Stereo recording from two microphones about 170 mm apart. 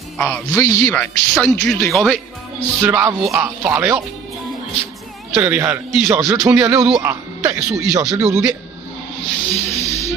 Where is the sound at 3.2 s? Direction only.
10° right (ahead or behind).